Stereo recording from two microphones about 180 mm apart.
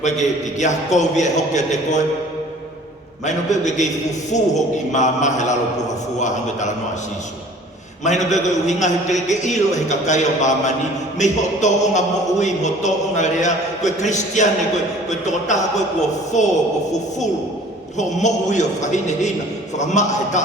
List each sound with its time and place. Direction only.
0.0 s a man's voice: 40° left (ahead or behind)
3.2 s a man's voice: 40° left (ahead or behind)
8.0 s a man's voice: 40° left (ahead or behind)
17.9 s a man's voice: 40° left (ahead or behind)